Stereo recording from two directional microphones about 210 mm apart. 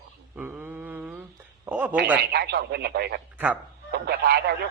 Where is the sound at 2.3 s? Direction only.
50° right (ahead or behind).